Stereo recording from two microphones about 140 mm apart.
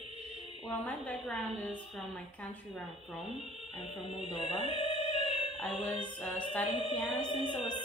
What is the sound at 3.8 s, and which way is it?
Speech, 40° left (ahead or behind).